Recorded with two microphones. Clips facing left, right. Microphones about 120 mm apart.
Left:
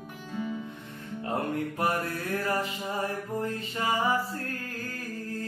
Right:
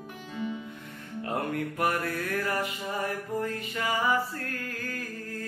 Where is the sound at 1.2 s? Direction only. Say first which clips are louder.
Left 1 dB; 25° left (ahead or behind).